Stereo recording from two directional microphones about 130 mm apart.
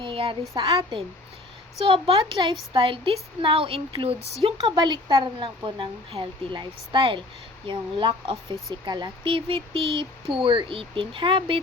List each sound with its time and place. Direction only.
0.0 s speech: 40° right (ahead or behind)
4.6 s a woman's voice: 35° right (ahead or behind)